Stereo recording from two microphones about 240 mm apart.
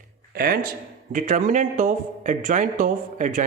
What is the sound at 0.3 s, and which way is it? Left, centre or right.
A man's voice, right.